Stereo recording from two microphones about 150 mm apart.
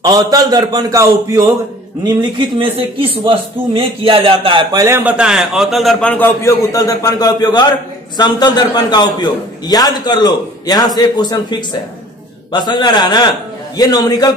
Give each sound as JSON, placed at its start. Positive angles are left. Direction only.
{"t": 0.0, "sound": "a man's voice", "side_deg": -25}
{"t": 2.3, "sound": "a man's voice", "side_deg": -35}
{"t": 4.7, "sound": "a man's voice", "side_deg": -15}